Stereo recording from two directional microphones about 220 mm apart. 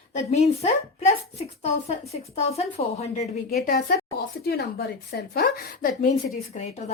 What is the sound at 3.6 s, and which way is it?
A woman's voice, 45° left (ahead or behind).